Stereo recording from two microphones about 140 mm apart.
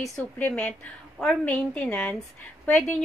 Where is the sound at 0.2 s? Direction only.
10° left (ahead or behind).